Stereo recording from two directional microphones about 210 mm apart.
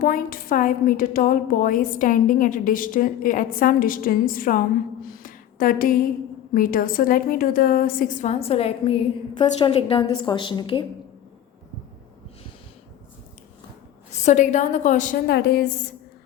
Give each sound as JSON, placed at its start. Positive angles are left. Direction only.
{"t": 0.0, "sound": "a woman's voice", "side_deg": 40}
{"t": 5.2, "sound": "a sound", "side_deg": 40}
{"t": 6.5, "sound": "a woman's voice", "side_deg": 40}
{"t": 14.1, "sound": "a woman's voice", "side_deg": 35}